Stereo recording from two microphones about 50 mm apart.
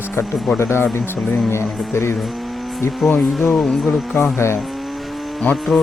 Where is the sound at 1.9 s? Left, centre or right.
Left.